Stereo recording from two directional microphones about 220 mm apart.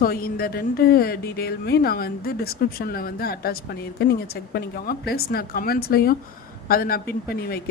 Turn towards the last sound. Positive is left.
turn(degrees=45)  # may be behind; listen again after turning